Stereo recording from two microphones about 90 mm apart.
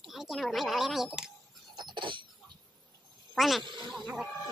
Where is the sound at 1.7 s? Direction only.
60° right (ahead or behind).